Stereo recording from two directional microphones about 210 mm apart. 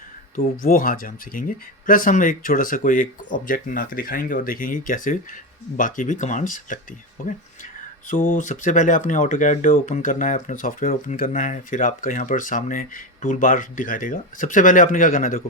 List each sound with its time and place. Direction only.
0.3 s speech: 40° left (ahead or behind)